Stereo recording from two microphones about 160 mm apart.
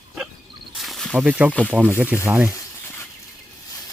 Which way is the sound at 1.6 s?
10° right (ahead or behind).